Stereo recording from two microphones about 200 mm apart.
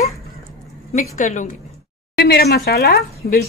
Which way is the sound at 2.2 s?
55° left (ahead or behind).